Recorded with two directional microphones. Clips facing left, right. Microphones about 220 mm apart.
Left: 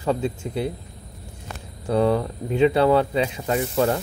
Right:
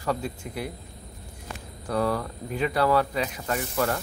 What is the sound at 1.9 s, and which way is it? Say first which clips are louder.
Speech: left 6 dB; 25° left (ahead or behind).